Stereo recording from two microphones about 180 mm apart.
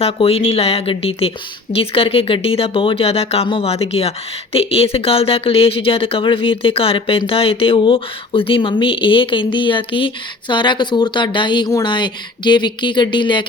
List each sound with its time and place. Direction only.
0.0 s speech: 30° left (ahead or behind)